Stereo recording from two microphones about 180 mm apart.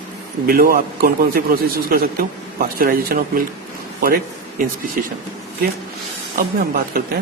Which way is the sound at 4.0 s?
55° right (ahead or behind).